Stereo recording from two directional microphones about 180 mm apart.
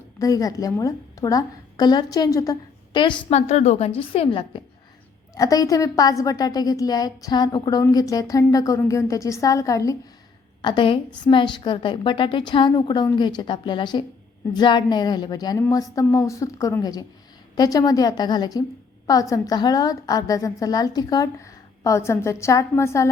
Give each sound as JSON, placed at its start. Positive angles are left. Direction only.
{"t": 0.2, "sound": "a woman's voice", "side_deg": 20}
{"t": 3.2, "sound": "a woman's voice", "side_deg": 35}